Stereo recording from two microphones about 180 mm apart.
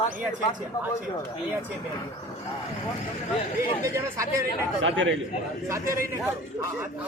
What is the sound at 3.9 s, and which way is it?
Speech, 15° right (ahead or behind).